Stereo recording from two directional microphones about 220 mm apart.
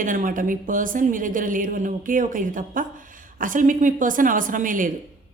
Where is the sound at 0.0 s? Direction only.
35° right (ahead or behind).